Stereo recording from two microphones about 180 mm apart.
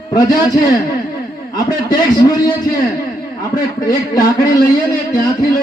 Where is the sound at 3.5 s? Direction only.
20° left (ahead or behind).